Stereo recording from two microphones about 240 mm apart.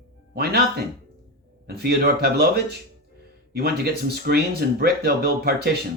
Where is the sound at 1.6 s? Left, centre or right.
Right.